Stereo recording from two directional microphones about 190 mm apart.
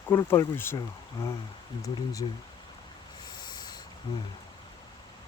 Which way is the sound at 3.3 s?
20° left (ahead or behind).